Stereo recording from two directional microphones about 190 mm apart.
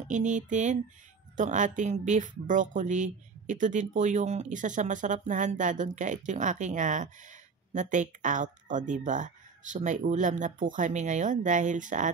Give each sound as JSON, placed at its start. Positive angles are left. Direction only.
{"t": 0.1, "sound": "speech", "side_deg": -40}